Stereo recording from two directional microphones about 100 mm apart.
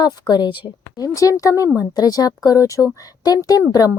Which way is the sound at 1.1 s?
35° left (ahead or behind).